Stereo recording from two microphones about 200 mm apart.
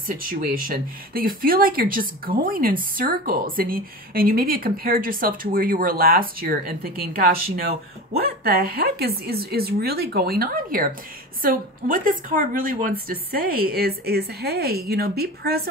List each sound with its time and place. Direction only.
0.2 s speech: 45° right (ahead or behind)